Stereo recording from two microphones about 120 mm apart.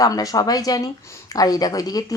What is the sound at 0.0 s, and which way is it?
A woman's voice, 30° left (ahead or behind).